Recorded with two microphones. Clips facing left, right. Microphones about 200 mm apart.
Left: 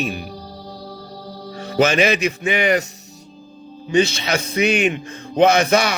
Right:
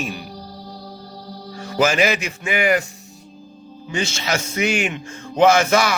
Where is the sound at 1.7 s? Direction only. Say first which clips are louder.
Left 2 dB; 20° left (ahead or behind).